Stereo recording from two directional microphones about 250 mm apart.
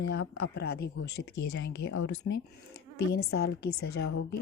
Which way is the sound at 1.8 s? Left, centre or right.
Left.